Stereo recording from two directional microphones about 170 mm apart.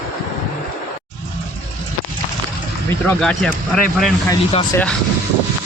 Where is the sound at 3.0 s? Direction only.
5° left (ahead or behind).